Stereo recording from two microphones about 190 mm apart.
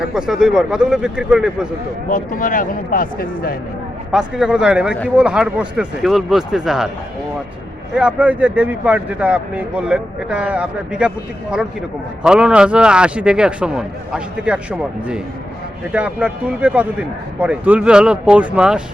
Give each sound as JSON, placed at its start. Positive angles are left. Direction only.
{"t": 0.0, "sound": "a man's voice", "side_deg": -5}
{"t": 2.0, "sound": "speech", "side_deg": 45}
{"t": 4.1, "sound": "a man's voice", "side_deg": -5}
{"t": 7.9, "sound": "speech", "side_deg": -5}
{"t": 12.2, "sound": "a man's voice", "side_deg": -5}